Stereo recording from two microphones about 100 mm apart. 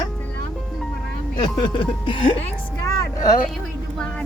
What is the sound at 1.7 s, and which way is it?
Speech, 55° left (ahead or behind).